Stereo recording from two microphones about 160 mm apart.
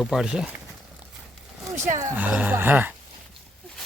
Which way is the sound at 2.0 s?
15° right (ahead or behind).